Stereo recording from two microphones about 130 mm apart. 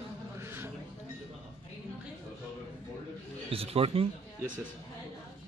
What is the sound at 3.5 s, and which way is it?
Speech, 45° right (ahead or behind).